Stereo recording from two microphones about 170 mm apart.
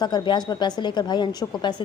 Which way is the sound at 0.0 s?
25° left (ahead or behind).